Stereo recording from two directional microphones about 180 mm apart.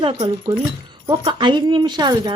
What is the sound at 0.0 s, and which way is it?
A woman's voice, 30° right (ahead or behind).